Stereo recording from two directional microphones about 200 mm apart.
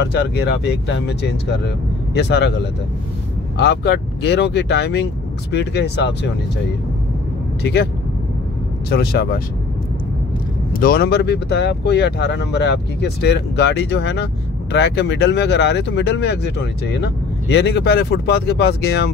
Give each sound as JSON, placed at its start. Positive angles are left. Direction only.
{"t": 0.0, "sound": "speech", "side_deg": 55}
{"t": 7.6, "sound": "speech", "side_deg": 55}
{"t": 10.8, "sound": "speech", "side_deg": 50}